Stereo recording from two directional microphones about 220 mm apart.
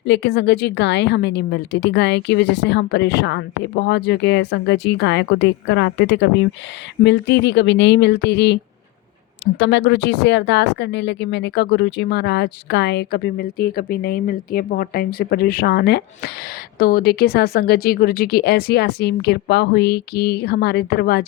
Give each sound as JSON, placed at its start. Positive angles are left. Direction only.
{"t": 0.0, "sound": "speech", "side_deg": 55}